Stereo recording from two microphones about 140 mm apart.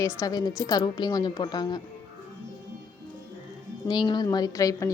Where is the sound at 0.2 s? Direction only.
30° left (ahead or behind).